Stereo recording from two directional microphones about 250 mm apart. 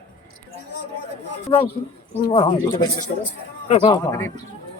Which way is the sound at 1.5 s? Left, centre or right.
Left.